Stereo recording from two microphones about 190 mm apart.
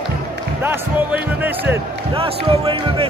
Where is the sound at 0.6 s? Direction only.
10° right (ahead or behind).